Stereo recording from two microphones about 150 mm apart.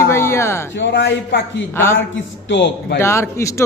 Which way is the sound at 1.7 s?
15° left (ahead or behind).